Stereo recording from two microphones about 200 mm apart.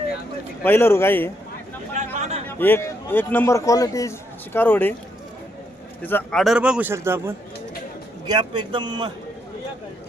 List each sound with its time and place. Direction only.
0.6 s a man's voice: 10° left (ahead or behind)
2.1 s a sound: 35° right (ahead or behind)
2.5 s a man's voice: 10° left (ahead or behind)
6.0 s a man's voice: 10° left (ahead or behind); by 7.3 s 10° right (ahead or behind)
8.3 s a man's voice: 25° right (ahead or behind)